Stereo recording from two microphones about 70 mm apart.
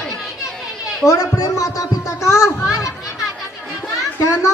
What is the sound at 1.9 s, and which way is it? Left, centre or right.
Music, left.